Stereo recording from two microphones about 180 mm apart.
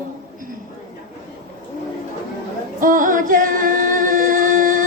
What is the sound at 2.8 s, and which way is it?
Music, 50° right (ahead or behind).